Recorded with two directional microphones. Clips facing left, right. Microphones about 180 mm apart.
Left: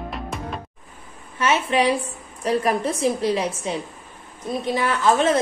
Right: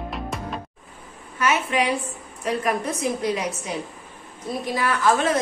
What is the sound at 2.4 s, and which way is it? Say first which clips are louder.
A woman's voice: left 3 dB; 35° left (ahead or behind).